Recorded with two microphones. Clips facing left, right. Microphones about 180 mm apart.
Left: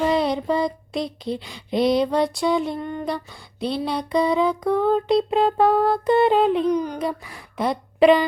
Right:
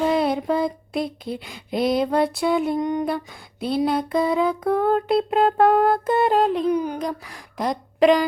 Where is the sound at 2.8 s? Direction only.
15° right (ahead or behind).